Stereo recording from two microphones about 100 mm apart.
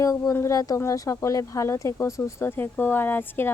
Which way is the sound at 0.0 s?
30° left (ahead or behind).